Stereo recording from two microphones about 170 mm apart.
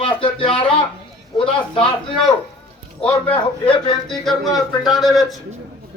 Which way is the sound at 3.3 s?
25° left (ahead or behind).